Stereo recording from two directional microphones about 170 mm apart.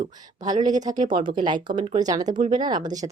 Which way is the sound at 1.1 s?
30° right (ahead or behind).